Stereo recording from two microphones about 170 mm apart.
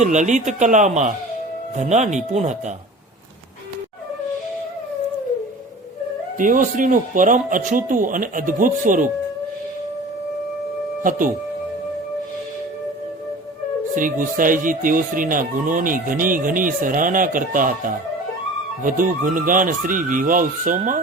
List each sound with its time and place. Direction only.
0.0 s speech: 45° right (ahead or behind)
6.4 s speech: 50° right (ahead or behind)
13.9 s speech: 50° right (ahead or behind)